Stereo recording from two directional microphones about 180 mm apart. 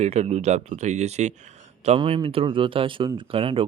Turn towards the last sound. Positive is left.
turn(degrees=-30)  # may be behind; listen again after turning